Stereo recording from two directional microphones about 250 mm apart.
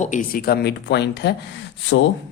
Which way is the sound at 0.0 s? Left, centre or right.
Left.